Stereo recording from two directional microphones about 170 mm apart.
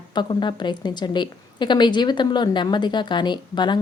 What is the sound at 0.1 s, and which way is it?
A woman's voice, 25° left (ahead or behind).